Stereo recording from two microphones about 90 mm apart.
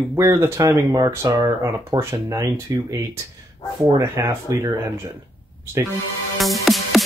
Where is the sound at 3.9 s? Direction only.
35° right (ahead or behind).